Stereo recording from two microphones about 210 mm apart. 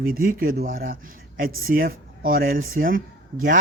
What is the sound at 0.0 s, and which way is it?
A man's voice, 45° right (ahead or behind).